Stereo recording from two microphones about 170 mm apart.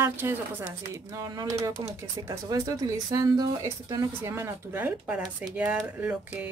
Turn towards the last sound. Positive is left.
turn(degrees=-10)  # may be behind; listen again after turning